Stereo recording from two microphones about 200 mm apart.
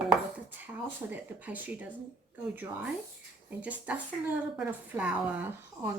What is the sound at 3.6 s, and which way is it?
Speech, 5° right (ahead or behind).